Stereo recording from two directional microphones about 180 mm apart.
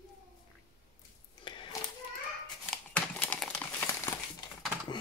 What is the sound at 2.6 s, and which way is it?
Crumpling, 5° left (ahead or behind).